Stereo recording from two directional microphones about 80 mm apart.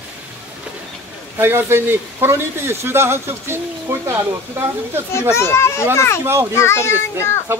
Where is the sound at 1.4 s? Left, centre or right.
Right.